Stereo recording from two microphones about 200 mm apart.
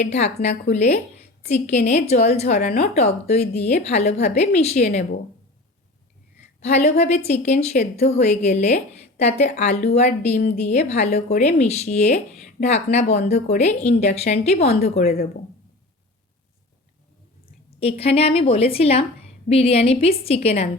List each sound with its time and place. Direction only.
0.0 s a woman's voice: 35° left (ahead or behind)
6.6 s a woman's voice: 35° left (ahead or behind)
17.7 s a woman's voice: 30° left (ahead or behind)